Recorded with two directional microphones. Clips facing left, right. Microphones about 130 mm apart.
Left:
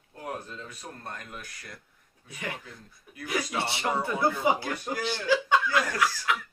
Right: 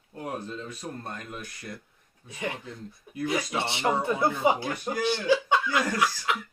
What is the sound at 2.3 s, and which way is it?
Speech, 25° right (ahead or behind).